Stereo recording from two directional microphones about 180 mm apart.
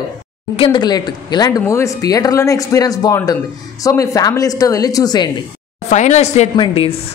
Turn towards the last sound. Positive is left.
turn(degrees=35)  # may be behind; listen again after turning